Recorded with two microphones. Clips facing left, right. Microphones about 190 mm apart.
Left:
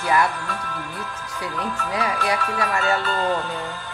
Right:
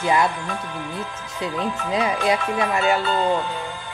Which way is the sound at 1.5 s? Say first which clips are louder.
Right 3 dB; 20° right (ahead or behind).